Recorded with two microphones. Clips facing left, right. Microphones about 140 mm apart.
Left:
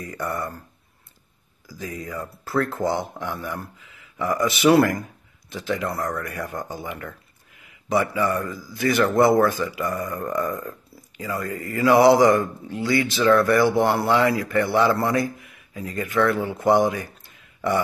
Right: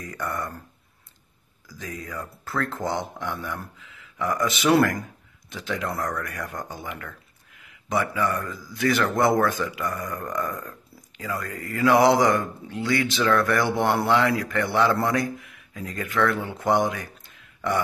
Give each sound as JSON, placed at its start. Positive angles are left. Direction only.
{"t": 0.0, "sound": "speech", "side_deg": 5}
{"t": 1.7, "sound": "speech", "side_deg": 5}